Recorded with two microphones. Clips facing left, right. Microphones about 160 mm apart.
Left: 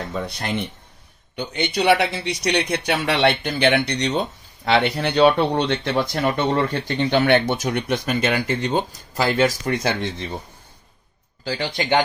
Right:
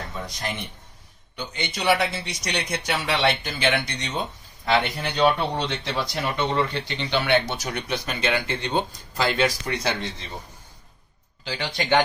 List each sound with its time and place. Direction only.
0.1 s speech: 65° left (ahead or behind)
11.4 s speech: 35° left (ahead or behind)